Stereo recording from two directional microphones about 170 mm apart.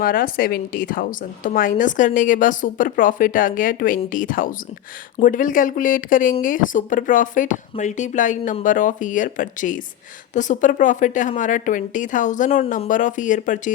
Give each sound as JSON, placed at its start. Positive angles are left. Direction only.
{"t": 0.0, "sound": "a woman's voice", "side_deg": 55}